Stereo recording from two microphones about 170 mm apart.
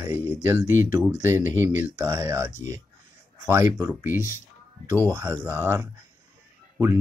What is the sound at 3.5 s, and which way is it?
Speech, 15° right (ahead or behind).